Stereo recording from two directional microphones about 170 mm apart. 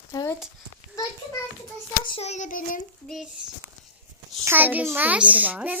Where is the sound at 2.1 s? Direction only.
40° left (ahead or behind).